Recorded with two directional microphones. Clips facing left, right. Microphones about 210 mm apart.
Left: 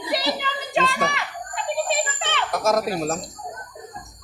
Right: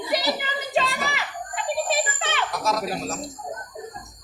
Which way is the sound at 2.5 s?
50° left (ahead or behind).